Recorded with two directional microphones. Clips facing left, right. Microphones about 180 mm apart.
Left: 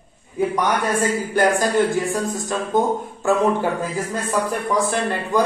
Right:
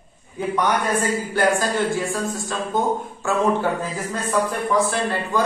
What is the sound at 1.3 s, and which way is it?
A man's voice, 15° left (ahead or behind).